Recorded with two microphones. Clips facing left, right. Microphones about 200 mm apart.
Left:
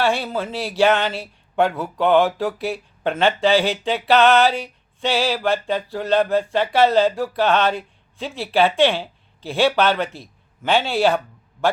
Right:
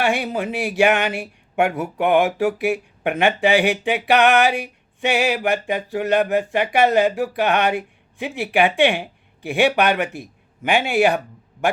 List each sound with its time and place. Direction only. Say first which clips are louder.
0.0 s speech: even; 15° right (ahead or behind)